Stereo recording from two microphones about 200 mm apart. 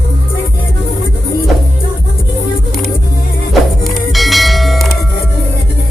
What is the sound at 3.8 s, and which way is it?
Music, centre (ahead or behind).